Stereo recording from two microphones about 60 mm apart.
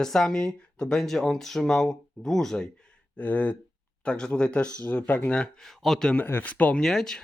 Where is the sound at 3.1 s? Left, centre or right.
Left.